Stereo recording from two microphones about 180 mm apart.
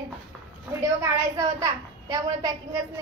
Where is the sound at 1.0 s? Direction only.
20° right (ahead or behind).